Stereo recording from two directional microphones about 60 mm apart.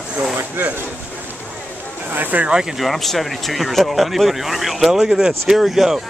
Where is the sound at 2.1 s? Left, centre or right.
Right.